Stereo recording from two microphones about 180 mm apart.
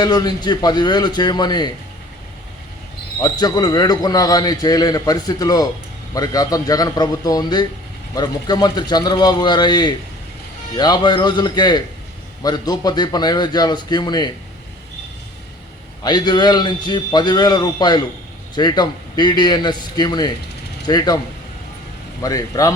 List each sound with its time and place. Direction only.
0.0 s a man's voice: 20° left (ahead or behind)
3.2 s a man's voice: 20° left (ahead or behind)
16.0 s a man's voice: 25° left (ahead or behind)
22.2 s a man's voice: 20° left (ahead or behind)